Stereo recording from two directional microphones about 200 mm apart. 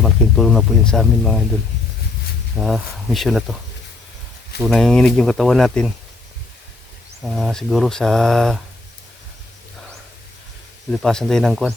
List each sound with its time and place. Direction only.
0.0 s speech: centre (ahead or behind)
2.6 s speech: centre (ahead or behind)
4.6 s speech: centre (ahead or behind)
7.2 s speech: centre (ahead or behind)
10.9 s speech: centre (ahead or behind)